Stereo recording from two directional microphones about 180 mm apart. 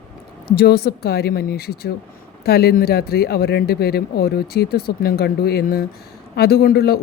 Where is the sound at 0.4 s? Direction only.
60° left (ahead or behind).